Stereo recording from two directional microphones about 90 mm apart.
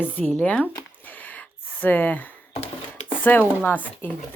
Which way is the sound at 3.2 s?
20° left (ahead or behind).